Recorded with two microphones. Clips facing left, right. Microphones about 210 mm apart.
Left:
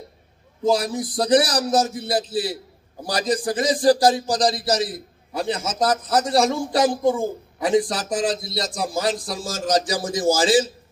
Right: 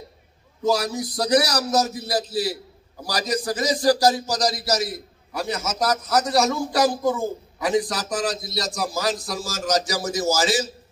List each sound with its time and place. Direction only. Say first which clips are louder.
0.7 s a man's voice: left 2 dB; 30° left (ahead or behind)